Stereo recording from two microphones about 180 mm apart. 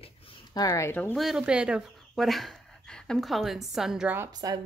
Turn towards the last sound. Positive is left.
turn(degrees=-15)  # may be behind; listen again after turning